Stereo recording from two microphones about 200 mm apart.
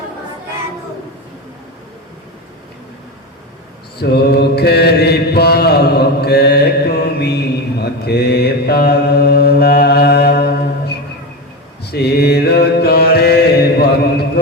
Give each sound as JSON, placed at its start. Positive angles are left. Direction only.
{"t": 3.9, "sound": "mantra", "side_deg": 50}